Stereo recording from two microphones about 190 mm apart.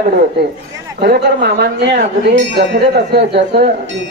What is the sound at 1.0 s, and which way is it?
Speech, 65° right (ahead or behind).